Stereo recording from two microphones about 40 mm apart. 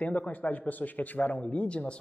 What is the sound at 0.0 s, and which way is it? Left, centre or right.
A man's voice, left.